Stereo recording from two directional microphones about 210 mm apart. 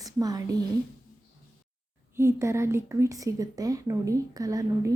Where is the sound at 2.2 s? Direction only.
15° right (ahead or behind).